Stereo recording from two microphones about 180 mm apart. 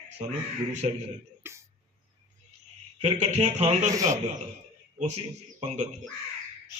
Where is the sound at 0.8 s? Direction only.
30° right (ahead or behind).